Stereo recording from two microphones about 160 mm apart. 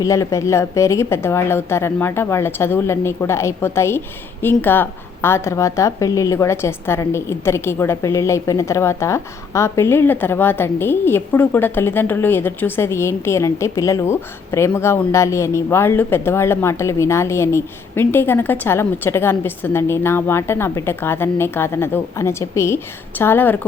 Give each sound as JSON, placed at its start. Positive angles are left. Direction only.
{"t": 0.0, "sound": "a woman's voice", "side_deg": 20}